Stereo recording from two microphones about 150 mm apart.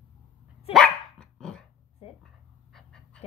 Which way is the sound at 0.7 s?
5° left (ahead or behind).